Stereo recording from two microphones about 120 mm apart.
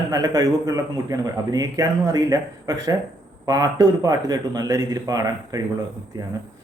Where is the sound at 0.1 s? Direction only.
30° right (ahead or behind).